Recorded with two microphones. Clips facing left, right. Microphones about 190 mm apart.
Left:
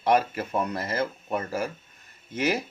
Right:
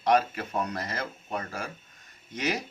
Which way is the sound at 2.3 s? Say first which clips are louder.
Left 4 dB; 5° left (ahead or behind).